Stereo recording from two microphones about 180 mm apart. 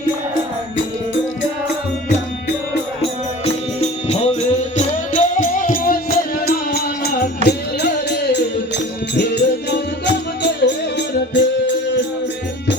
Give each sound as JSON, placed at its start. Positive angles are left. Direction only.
{"t": 3.4, "sound": "music", "side_deg": 35}